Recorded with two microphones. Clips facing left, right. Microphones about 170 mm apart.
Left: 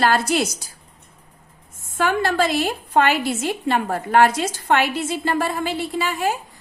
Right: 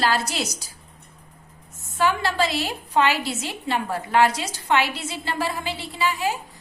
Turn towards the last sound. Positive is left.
turn(degrees=50)  # may be behind; listen again after turning